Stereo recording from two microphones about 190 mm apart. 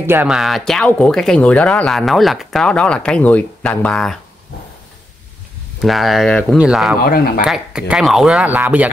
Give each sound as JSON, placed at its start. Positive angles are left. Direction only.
{"t": 0.0, "sound": "speech", "side_deg": -10}
{"t": 5.8, "sound": "speech", "side_deg": 0}
{"t": 7.0, "sound": "speech", "side_deg": 50}
{"t": 7.4, "sound": "speech", "side_deg": -5}